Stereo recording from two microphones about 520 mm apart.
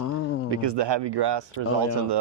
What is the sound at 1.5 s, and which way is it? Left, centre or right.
Speech, left.